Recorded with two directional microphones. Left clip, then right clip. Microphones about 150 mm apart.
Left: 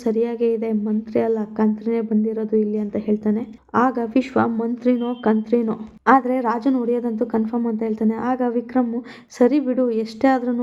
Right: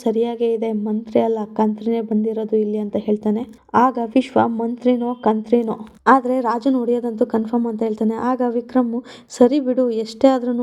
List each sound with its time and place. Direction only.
0.0 s a woman's voice: 25° right (ahead or behind)